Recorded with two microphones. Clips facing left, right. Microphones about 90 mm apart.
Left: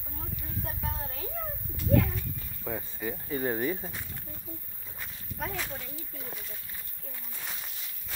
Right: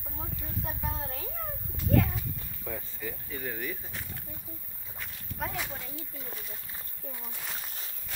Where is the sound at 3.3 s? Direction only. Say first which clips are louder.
Left 9 dB; 35° left (ahead or behind).